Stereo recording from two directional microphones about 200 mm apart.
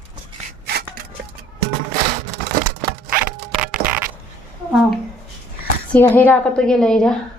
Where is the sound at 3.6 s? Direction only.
5° right (ahead or behind).